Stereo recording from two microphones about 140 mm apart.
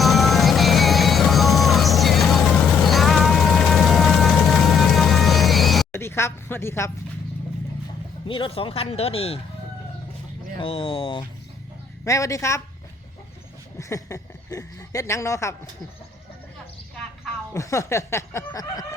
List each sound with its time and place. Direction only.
0.0 s music: centre (ahead or behind)
5.9 s a sound: 15° left (ahead or behind)
8.3 s speech: 40° left (ahead or behind)
10.6 s speech: 40° left (ahead or behind)
12.0 s speech: 20° left (ahead or behind)
13.7 s speech: 20° left (ahead or behind)
17.5 s speech: 20° left (ahead or behind)